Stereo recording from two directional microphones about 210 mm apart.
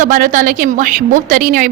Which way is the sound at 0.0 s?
40° right (ahead or behind).